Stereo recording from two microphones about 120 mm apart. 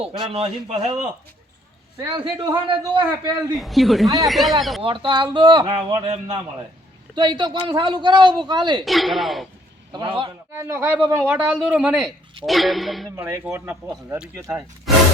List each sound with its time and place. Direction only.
0.0 s a man's voice: 55° right (ahead or behind)
2.1 s speech: 40° right (ahead or behind)
3.5 s a man's voice: centre (ahead or behind)
4.8 s speech: 45° right (ahead or behind)
7.2 s speech: 40° right (ahead or behind)
8.8 s a man's voice: centre (ahead or behind)
9.9 s speech: 40° right (ahead or behind)
10.5 s a man's voice: 20° right (ahead or behind); by 13.1 s centre (ahead or behind)
13.1 s speech: 25° right (ahead or behind)
14.9 s a man's voice: centre (ahead or behind)